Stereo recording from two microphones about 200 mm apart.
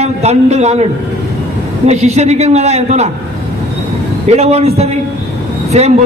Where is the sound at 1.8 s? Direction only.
35° right (ahead or behind).